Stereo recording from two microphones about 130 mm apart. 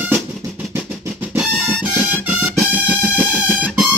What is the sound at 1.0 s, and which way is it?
Music, 20° right (ahead or behind).